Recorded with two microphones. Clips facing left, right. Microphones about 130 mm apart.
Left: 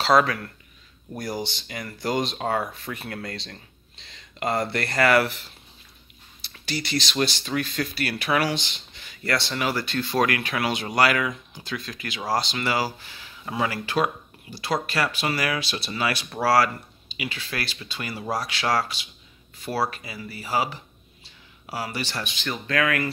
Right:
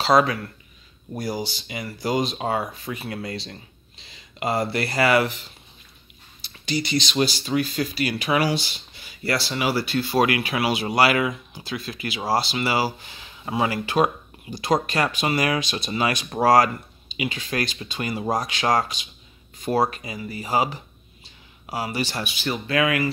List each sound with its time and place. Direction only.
0.0 s speech: 5° right (ahead or behind)